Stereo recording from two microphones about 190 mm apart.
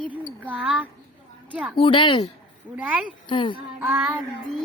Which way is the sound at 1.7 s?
25° left (ahead or behind).